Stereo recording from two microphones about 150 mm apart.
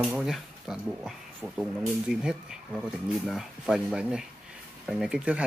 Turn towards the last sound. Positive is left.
turn(degrees=-5)  # may be behind; listen again after turning